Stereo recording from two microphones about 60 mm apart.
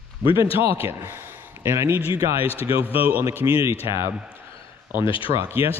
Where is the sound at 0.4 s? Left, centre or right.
Right.